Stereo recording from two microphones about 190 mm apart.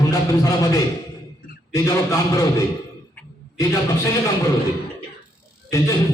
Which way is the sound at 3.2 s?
15° left (ahead or behind).